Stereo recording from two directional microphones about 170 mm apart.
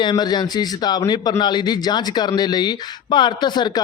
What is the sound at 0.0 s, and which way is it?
Speech, 25° left (ahead or behind).